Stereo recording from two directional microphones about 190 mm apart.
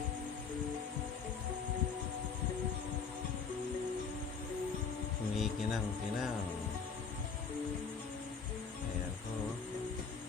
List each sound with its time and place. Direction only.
5.4 s music: centre (ahead or behind)